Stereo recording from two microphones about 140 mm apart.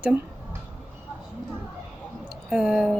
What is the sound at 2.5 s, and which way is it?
Speech, 5° right (ahead or behind).